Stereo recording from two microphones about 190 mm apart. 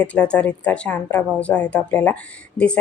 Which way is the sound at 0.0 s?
5° left (ahead or behind).